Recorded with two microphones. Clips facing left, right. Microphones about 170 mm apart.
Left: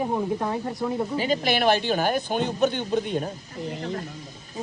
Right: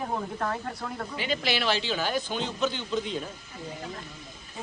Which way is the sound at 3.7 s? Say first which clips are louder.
Left 7 dB; 70° left (ahead or behind).